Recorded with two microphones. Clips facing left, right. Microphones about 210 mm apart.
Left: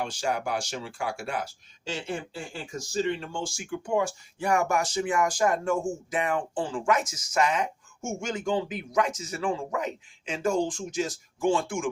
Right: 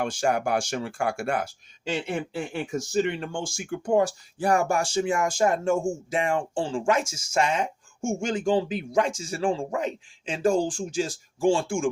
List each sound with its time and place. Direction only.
0.0 s speech: 50° right (ahead or behind)
1.9 s speech: 60° right (ahead or behind); by 11.9 s 30° right (ahead or behind)